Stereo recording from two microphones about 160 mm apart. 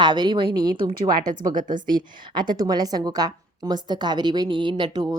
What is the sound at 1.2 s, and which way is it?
Speech, 55° right (ahead or behind).